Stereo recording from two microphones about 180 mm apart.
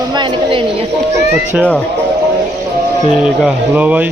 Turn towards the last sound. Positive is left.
turn(degrees=-10)  # may be behind; listen again after turning